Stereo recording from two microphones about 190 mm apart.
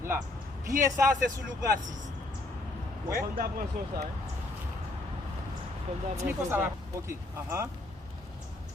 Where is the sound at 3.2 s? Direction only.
50° right (ahead or behind).